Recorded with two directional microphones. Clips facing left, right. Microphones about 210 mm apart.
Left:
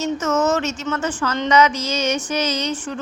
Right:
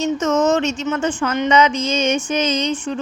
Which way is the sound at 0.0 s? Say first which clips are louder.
Right 3 dB; 15° right (ahead or behind).